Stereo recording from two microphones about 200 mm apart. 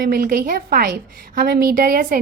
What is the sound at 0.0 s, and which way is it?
A woman's voice, 45° right (ahead or behind).